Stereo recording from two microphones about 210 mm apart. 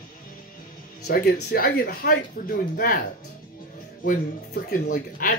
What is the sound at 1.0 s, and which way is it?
Speech, 50° left (ahead or behind).